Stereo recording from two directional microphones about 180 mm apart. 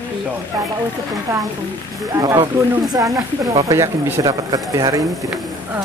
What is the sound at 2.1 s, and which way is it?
Speech, 20° right (ahead or behind).